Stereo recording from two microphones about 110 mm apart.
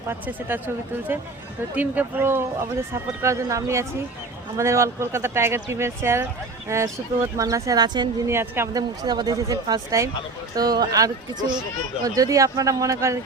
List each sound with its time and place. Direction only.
0.1 s speech: 20° right (ahead or behind)
1.7 s speech: 15° right (ahead or behind); by 8.0 s 35° right (ahead or behind)
8.3 s speech: 20° right (ahead or behind)
8.7 s speech: 35° right (ahead or behind)